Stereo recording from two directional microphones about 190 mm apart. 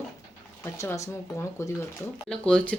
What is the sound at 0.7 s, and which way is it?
Speech, 15° left (ahead or behind).